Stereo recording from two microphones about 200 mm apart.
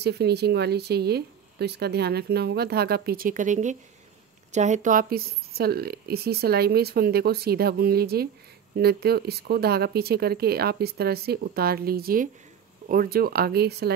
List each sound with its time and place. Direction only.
0.0 s speech: 55° right (ahead or behind)